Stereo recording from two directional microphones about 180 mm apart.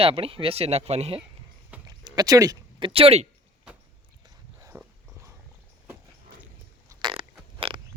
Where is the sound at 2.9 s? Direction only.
35° right (ahead or behind).